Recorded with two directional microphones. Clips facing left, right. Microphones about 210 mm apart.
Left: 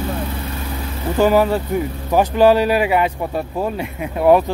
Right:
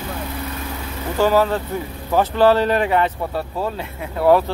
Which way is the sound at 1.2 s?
15° left (ahead or behind).